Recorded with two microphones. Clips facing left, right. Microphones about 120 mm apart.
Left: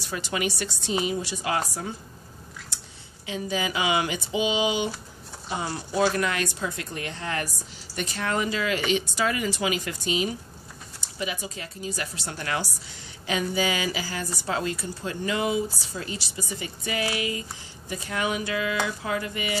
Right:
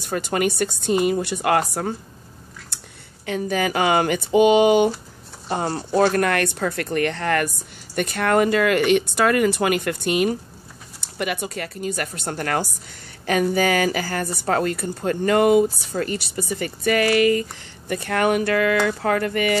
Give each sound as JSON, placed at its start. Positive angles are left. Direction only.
{"t": 0.0, "sound": "a woman's voice", "side_deg": -50}
{"t": 2.7, "sound": "a sound", "side_deg": -55}
{"t": 3.3, "sound": "speech", "side_deg": -55}